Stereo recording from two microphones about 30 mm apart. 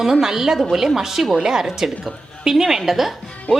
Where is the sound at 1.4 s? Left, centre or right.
Centre.